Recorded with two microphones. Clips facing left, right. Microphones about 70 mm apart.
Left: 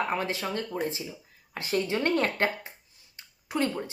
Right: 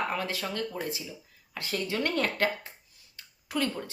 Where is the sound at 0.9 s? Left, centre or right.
Left.